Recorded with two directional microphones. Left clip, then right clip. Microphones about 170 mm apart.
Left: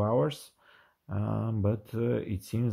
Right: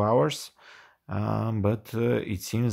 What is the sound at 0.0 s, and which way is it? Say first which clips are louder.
Speech: right 5 dB; 25° right (ahead or behind).